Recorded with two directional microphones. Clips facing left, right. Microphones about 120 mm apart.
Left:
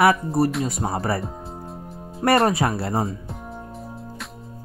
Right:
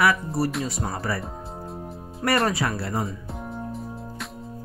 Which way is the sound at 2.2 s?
30° left (ahead or behind).